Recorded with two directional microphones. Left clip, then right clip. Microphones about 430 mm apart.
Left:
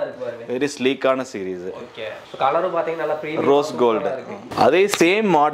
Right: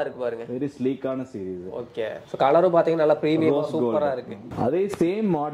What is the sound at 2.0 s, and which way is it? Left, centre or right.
Speech, left.